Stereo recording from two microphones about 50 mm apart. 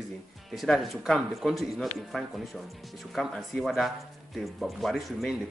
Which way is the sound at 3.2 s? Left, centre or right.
Centre.